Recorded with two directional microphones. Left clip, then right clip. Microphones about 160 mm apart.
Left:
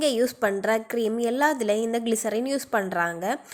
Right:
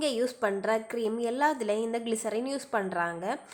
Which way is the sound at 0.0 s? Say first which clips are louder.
Left 5 dB; 20° left (ahead or behind).